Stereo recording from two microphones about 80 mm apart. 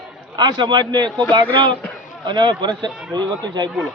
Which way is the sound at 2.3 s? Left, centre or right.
Right.